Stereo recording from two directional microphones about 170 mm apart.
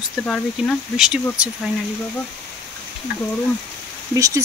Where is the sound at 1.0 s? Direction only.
5° right (ahead or behind).